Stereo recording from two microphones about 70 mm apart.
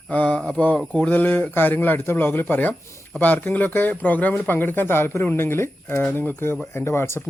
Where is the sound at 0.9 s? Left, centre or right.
Left.